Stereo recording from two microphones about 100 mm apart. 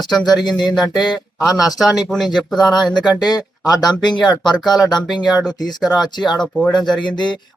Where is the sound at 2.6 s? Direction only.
45° left (ahead or behind).